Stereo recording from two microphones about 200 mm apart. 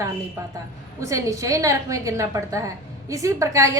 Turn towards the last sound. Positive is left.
turn(degrees=-15)  # may be behind; listen again after turning